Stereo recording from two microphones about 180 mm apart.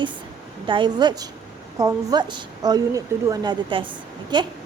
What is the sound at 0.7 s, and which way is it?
A woman's voice, 25° right (ahead or behind).